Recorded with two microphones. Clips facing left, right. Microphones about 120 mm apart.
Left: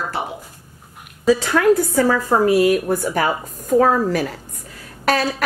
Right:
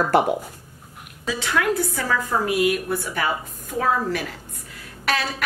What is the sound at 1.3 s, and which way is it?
A woman's voice, 40° left (ahead or behind).